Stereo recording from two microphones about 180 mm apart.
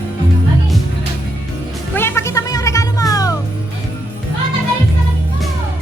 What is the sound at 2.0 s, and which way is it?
Music, 15° left (ahead or behind).